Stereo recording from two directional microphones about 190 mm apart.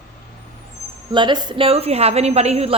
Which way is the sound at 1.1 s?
25° right (ahead or behind).